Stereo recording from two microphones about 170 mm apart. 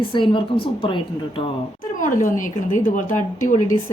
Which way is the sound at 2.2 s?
50° left (ahead or behind).